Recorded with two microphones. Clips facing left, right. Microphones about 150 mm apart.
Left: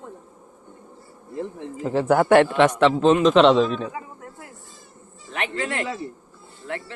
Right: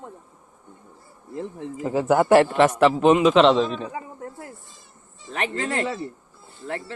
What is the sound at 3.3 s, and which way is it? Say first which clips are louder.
Speech: left 1 dB; centre (ahead or behind).